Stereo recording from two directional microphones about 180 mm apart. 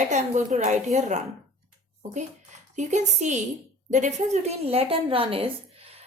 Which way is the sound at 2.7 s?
40° right (ahead or behind).